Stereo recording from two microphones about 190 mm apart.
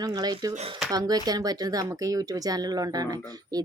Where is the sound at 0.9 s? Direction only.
20° right (ahead or behind).